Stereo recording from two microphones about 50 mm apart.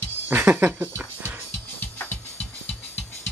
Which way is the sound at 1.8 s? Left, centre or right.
Left.